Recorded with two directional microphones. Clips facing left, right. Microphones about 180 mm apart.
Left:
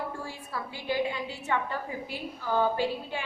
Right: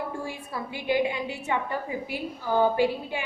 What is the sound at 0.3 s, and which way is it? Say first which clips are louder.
A woman's voice: right 3 dB; 15° right (ahead or behind).